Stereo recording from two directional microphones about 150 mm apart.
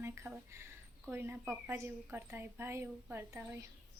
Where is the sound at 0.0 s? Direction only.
15° right (ahead or behind).